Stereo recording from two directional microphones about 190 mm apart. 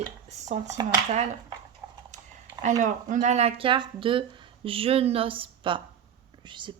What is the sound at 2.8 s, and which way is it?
A woman's voice, 40° right (ahead or behind).